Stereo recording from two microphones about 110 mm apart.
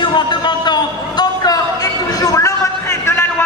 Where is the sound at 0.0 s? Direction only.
45° left (ahead or behind).